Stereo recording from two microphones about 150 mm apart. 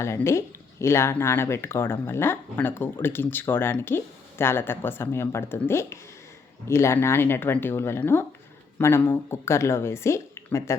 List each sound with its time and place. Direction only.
0.0 s speech: 20° left (ahead or behind)